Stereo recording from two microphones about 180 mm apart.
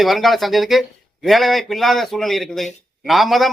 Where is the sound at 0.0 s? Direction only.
Centre (ahead or behind).